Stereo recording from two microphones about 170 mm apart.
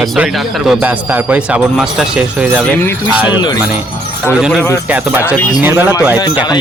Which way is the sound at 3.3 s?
25° left (ahead or behind).